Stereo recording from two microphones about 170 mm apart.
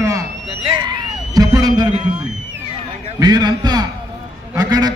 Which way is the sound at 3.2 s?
25° right (ahead or behind).